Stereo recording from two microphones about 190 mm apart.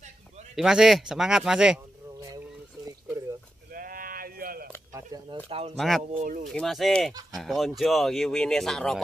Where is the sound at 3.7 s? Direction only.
50° right (ahead or behind).